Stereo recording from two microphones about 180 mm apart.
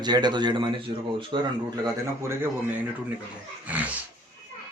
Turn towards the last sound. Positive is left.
turn(degrees=-10)  # may be behind; listen again after turning